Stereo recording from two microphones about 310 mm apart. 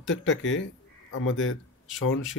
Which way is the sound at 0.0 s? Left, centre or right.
Left.